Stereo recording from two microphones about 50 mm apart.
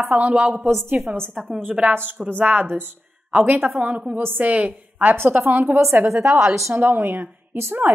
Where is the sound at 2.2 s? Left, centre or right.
Right.